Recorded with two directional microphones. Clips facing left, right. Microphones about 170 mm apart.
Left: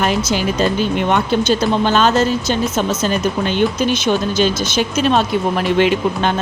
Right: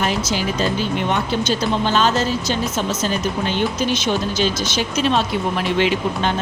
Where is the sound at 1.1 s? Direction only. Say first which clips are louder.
Left 5 dB; 55° left (ahead or behind).